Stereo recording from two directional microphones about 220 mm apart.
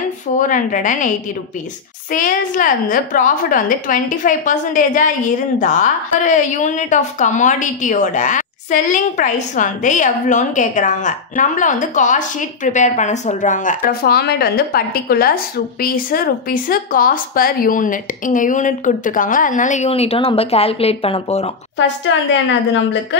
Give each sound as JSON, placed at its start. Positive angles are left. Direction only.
{"t": 0.4, "sound": "a woman's voice", "side_deg": 35}
{"t": 22.1, "sound": "a woman's voice", "side_deg": 60}